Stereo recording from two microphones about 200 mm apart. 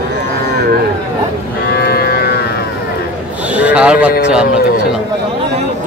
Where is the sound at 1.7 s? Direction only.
50° left (ahead or behind).